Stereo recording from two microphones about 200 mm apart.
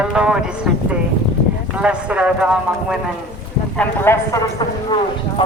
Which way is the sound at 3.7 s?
10° left (ahead or behind).